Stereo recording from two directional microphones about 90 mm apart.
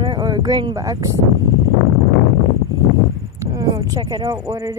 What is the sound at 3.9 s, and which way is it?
Speech, 45° right (ahead or behind).